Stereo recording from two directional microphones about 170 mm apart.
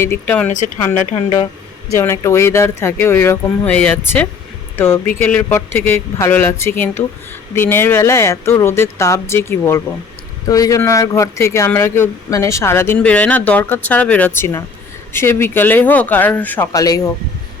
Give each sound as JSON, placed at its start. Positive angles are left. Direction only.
{"t": 0.0, "sound": "speech", "side_deg": 10}
{"t": 1.9, "sound": "speech", "side_deg": 15}